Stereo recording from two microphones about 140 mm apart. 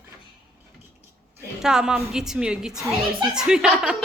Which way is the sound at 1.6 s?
5° right (ahead or behind).